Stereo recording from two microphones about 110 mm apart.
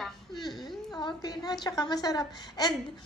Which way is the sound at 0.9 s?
40° left (ahead or behind).